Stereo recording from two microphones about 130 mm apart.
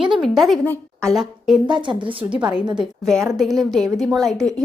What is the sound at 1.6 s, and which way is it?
Speech, 35° right (ahead or behind).